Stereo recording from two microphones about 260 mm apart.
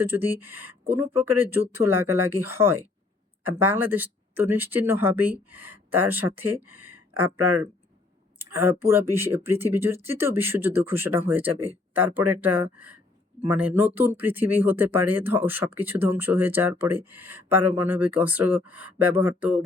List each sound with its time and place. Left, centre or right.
0.0 s speech: centre
6.7 s speech: right
8.8 s speech: centre